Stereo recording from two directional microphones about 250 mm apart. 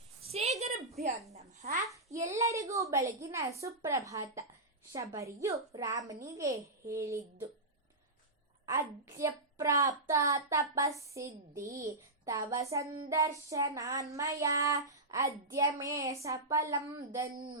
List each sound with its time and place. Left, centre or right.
0.3 s a sound: right
1.3 s a woman's voice: right
2.1 s speech: centre
9.1 s speech: centre